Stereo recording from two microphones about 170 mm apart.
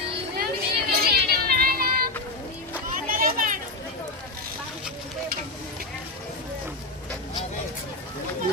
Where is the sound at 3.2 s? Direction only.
55° right (ahead or behind).